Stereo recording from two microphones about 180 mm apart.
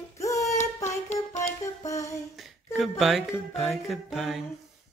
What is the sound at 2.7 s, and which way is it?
Speech, centre (ahead or behind).